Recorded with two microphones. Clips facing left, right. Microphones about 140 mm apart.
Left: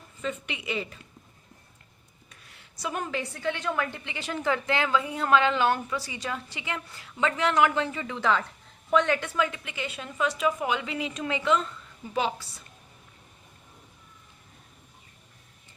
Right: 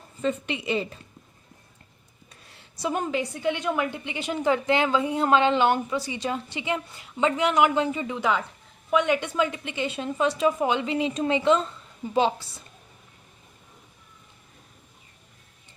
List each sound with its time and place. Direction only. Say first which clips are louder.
0.2 s a woman's voice: right 6 dB; 30° right (ahead or behind)
2.3 s a woman's voice: right 2 dB; 30° right (ahead or behind)